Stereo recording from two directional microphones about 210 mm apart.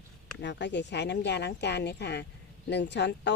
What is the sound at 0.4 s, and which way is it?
Speech, 55° left (ahead or behind).